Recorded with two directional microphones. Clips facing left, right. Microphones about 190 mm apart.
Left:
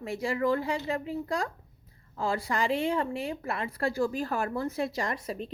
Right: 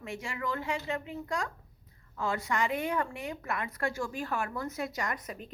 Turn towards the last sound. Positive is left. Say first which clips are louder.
# left 4 dB
turn(degrees=30)  # may be behind; listen again after turning